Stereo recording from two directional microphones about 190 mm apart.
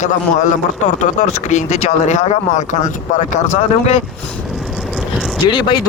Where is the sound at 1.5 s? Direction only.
35° left (ahead or behind).